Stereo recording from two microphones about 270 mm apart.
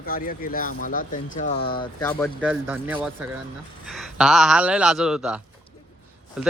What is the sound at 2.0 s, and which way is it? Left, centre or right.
Speech, centre.